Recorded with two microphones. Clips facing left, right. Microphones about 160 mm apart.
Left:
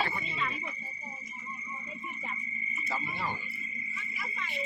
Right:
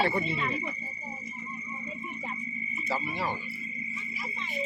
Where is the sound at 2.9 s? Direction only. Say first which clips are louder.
Right 4 dB; 90° right.